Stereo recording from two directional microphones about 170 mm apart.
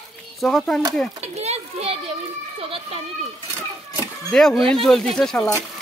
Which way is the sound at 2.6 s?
35° right (ahead or behind).